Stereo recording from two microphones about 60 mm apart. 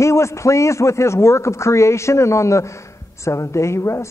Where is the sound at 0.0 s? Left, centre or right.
Left.